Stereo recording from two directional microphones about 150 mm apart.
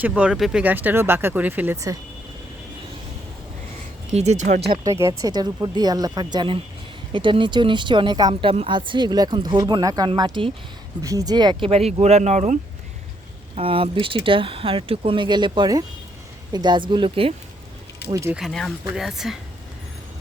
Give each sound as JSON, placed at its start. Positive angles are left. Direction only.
{"t": 0.0, "sound": "speech", "side_deg": -10}
{"t": 4.1, "sound": "speech", "side_deg": -50}
{"t": 4.8, "sound": "speech", "side_deg": -20}
{"t": 11.7, "sound": "speech", "side_deg": -45}
{"t": 13.6, "sound": "speech", "side_deg": -40}
{"t": 18.1, "sound": "speech", "side_deg": -20}
{"t": 18.3, "sound": "speech", "side_deg": 0}